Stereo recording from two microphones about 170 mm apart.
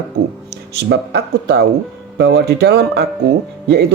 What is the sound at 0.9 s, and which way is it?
A man's voice, 80° right.